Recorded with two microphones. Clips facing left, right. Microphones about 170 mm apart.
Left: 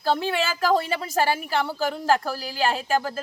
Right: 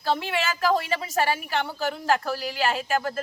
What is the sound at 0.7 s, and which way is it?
A woman's voice, 35° left (ahead or behind).